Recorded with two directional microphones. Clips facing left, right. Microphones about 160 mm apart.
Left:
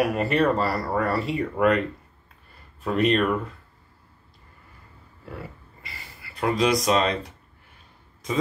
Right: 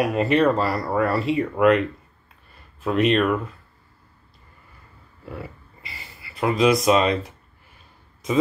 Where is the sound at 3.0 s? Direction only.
20° right (ahead or behind).